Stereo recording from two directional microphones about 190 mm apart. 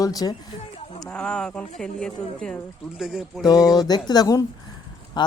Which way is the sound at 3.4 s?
20° left (ahead or behind).